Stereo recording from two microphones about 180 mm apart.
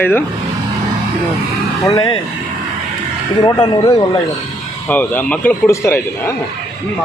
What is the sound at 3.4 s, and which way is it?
Speech, 25° left (ahead or behind).